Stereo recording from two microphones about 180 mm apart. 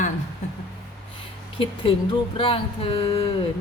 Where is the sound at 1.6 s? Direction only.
30° left (ahead or behind).